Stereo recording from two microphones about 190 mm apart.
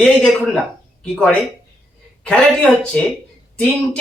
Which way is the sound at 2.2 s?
5° left (ahead or behind).